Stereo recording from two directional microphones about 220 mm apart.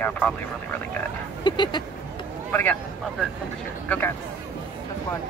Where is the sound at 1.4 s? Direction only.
20° left (ahead or behind).